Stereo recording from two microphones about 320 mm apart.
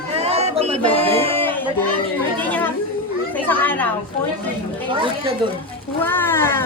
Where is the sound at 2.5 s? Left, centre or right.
Centre.